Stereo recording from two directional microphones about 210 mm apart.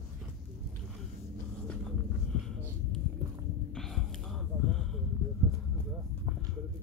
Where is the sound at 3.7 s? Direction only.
Centre (ahead or behind).